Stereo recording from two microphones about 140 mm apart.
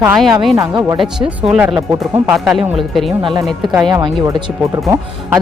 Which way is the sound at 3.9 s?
30° right (ahead or behind).